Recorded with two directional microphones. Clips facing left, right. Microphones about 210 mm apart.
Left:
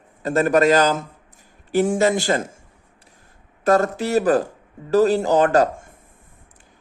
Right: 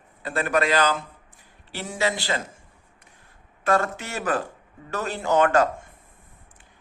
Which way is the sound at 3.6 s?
40° left (ahead or behind).